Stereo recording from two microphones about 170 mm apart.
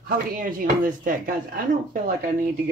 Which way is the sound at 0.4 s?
55° right (ahead or behind).